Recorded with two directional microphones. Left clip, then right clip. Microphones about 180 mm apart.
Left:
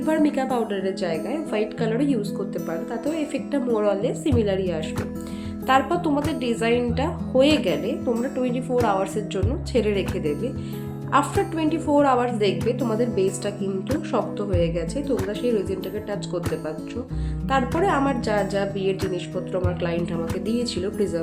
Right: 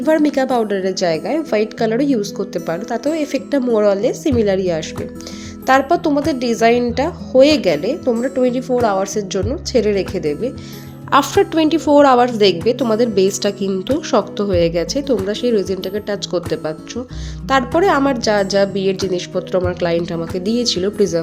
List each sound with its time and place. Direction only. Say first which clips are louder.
0.0 s speech: right 7 dB; 35° right (ahead or behind)
11.1 s a woman's voice: right 8 dB; 50° right (ahead or behind)
17.7 s a woman's voice: right 8 dB; 45° right (ahead or behind)